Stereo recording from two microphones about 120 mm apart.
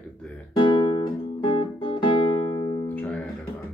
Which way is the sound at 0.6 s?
40° left (ahead or behind).